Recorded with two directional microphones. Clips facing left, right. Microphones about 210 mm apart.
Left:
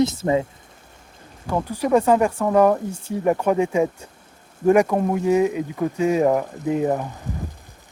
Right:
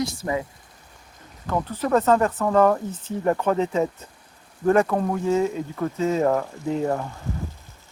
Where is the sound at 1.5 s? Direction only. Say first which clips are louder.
Left 3 dB; 10° left (ahead or behind).